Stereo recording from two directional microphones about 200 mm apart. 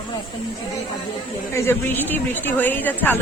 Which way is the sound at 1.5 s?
10° left (ahead or behind).